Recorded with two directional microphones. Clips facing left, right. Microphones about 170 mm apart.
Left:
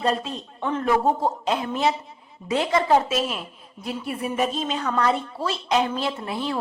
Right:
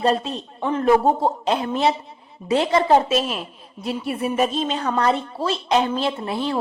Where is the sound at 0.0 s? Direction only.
25° right (ahead or behind).